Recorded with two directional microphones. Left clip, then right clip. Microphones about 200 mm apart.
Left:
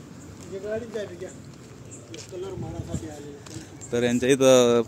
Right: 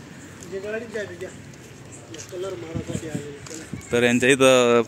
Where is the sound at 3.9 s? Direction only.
Centre (ahead or behind).